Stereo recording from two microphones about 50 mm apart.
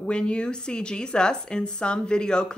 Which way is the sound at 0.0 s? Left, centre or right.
Centre.